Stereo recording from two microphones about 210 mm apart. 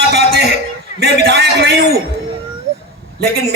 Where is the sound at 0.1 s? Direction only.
50° right (ahead or behind).